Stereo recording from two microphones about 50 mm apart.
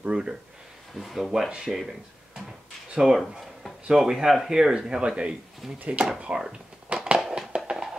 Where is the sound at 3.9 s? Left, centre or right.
Centre.